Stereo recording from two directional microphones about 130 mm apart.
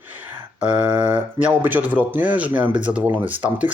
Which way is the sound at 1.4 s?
15° right (ahead or behind).